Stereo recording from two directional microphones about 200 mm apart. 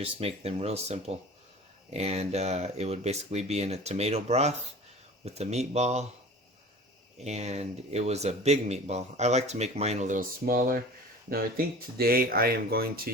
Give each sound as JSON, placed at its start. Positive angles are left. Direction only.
{"t": 0.0, "sound": "a man's voice", "side_deg": -30}
{"t": 7.2, "sound": "a man's voice", "side_deg": -35}